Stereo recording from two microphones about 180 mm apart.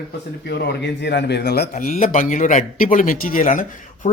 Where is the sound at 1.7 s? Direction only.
45° left (ahead or behind).